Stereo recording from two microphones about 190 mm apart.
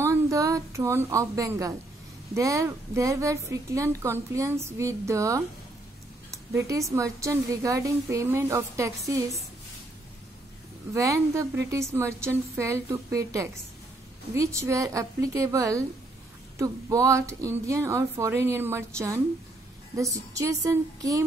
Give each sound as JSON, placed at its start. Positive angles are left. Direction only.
{"t": 0.0, "sound": "a woman's voice", "side_deg": -15}
{"t": 6.5, "sound": "a woman's voice", "side_deg": -15}
{"t": 10.9, "sound": "a woman's voice", "side_deg": -15}